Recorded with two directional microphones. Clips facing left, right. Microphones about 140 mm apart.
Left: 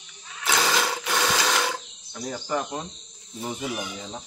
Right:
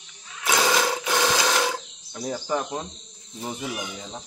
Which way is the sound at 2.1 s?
10° right (ahead or behind).